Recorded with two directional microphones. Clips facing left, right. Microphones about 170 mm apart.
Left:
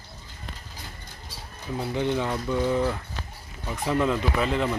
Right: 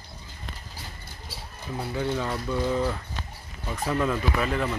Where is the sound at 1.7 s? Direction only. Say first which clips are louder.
Left 2 dB; 20° left (ahead or behind).